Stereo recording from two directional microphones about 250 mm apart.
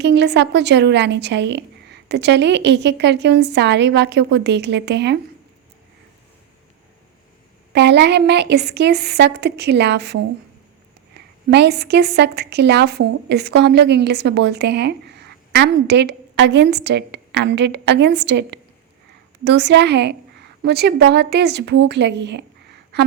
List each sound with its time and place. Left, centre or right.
0.0 s a woman's voice: right
7.7 s a woman's voice: right
11.4 s a woman's voice: right